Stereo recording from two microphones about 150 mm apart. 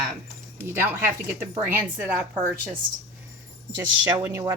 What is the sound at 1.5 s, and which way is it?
Speech, 10° right (ahead or behind).